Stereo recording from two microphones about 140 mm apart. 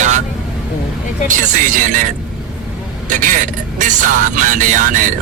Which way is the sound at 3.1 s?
70° right (ahead or behind).